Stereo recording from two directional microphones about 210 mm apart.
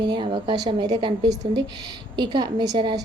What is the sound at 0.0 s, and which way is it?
A woman's voice, 20° right (ahead or behind).